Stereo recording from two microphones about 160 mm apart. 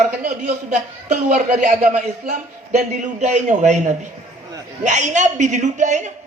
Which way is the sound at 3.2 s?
45° right (ahead or behind).